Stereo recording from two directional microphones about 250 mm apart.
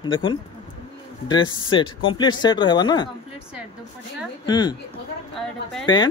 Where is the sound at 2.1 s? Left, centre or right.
Centre.